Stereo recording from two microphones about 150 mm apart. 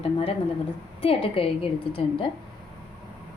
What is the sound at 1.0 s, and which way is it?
Speech, 40° left (ahead or behind).